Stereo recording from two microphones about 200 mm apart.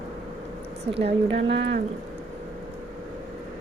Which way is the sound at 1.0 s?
60° right (ahead or behind).